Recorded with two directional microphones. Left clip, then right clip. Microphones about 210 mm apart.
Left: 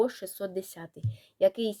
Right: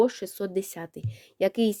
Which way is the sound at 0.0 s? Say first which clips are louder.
Right 4 dB; 50° right (ahead or behind).